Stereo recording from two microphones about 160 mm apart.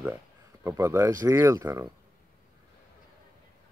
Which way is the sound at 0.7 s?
15° right (ahead or behind).